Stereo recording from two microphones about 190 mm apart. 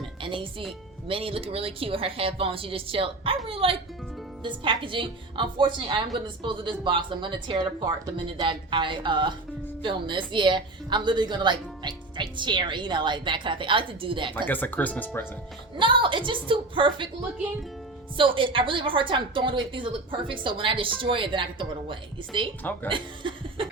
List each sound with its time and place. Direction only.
0.2 s music: 25° right (ahead or behind)
1.0 s a woman's voice: 30° right (ahead or behind)
14.4 s speech: 10° left (ahead or behind)
15.8 s a woman's voice: 25° right (ahead or behind)
18.2 s a woman's voice: 25° right (ahead or behind)
22.9 s chuckle: 25° right (ahead or behind)